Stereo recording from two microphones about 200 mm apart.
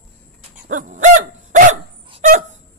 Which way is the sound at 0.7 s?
40° right (ahead or behind).